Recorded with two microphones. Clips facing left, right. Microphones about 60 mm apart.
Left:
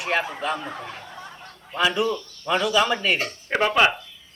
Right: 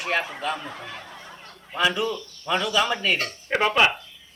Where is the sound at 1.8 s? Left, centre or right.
Centre.